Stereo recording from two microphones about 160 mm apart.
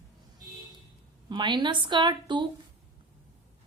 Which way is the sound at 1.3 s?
30° right (ahead or behind).